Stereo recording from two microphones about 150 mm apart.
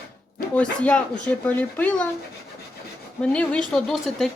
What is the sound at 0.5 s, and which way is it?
Speech, 10° left (ahead or behind).